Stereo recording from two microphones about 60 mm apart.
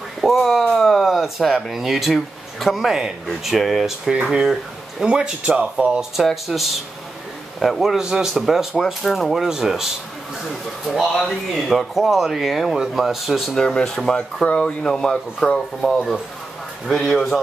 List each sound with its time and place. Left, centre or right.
0.2 s a sound: centre
3.3 s a man's voice: centre
6.2 s a man's voice: centre
10.9 s speech: centre
13.6 s speech: centre